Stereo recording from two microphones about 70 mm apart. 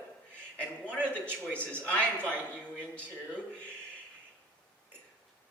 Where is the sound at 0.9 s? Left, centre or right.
Centre.